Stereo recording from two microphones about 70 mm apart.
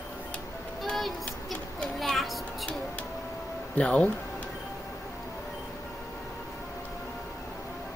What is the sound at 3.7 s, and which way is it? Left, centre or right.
Speech, centre.